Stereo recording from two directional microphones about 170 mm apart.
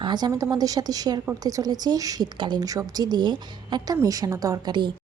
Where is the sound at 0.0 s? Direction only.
25° right (ahead or behind).